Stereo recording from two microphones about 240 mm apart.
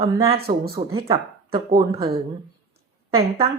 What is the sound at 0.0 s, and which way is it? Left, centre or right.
Speech, right.